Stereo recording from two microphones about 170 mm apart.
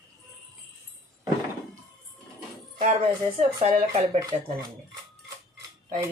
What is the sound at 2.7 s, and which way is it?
Speech, 40° right (ahead or behind).